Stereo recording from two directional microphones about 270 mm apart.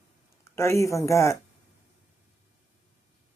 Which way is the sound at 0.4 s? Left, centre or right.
Centre.